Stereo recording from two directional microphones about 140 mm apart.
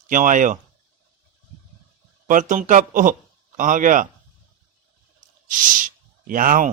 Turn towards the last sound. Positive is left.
turn(degrees=-75)  # may be behind; listen again after turning